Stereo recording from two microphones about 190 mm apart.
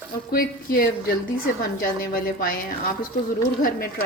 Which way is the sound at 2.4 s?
45° left (ahead or behind).